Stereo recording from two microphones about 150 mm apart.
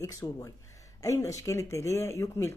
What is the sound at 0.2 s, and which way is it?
Speech, 25° left (ahead or behind).